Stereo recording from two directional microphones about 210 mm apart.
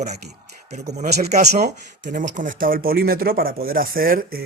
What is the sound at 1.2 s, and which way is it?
Speech, 35° right (ahead or behind).